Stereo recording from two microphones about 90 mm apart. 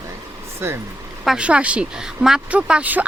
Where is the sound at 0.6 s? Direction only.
25° right (ahead or behind).